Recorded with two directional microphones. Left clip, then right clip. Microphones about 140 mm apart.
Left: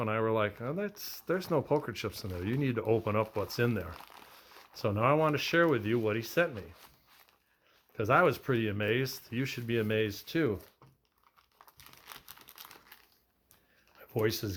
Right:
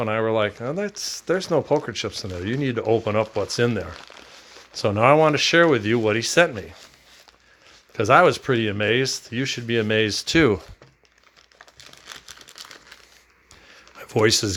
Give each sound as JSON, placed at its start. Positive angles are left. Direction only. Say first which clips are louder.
{"t": 0.0, "sound": "speech", "louder": "right 9 dB", "side_deg": -20}
{"t": 7.9, "sound": "speech", "louder": "right 11 dB", "side_deg": -35}
{"t": 12.0, "sound": "crumpling", "louder": "right 10 dB", "side_deg": -10}
{"t": 14.0, "sound": "speech", "louder": "right 13 dB", "side_deg": -55}